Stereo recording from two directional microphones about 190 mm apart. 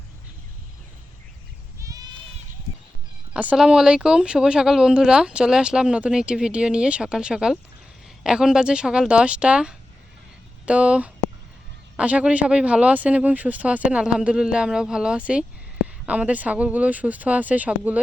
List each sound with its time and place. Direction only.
1.8 s goat: 20° right (ahead or behind)
3.3 s speech: 5° right (ahead or behind)